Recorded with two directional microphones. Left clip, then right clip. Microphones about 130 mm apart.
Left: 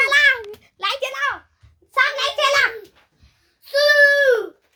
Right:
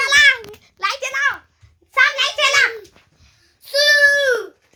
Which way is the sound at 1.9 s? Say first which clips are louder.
Right 3 dB; 25° right (ahead or behind).